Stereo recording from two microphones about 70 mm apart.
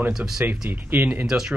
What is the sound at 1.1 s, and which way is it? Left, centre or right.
Speech, centre.